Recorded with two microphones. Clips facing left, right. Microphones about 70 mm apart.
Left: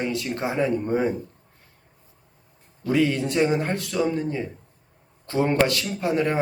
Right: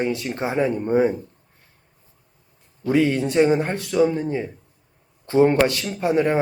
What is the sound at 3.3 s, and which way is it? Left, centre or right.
Speech, right.